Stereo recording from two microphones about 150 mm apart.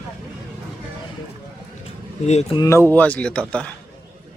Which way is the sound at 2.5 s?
20° left (ahead or behind).